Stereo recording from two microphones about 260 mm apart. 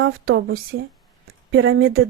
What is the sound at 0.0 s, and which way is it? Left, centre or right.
Speech, right.